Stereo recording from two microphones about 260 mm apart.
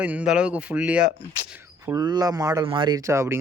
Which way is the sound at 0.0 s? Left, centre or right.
Centre.